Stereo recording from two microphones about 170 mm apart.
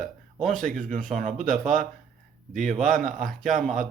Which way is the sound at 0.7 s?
50° right (ahead or behind).